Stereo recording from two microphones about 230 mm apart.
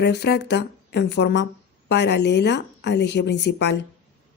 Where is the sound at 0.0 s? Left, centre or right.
Left.